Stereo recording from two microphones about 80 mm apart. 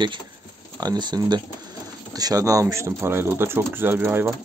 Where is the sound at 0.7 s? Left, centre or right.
Right.